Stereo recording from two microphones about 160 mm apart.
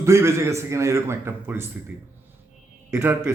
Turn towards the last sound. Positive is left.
turn(degrees=-10)  # may be behind; listen again after turning